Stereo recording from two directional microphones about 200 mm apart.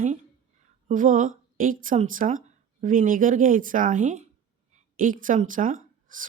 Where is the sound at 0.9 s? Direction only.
40° right (ahead or behind).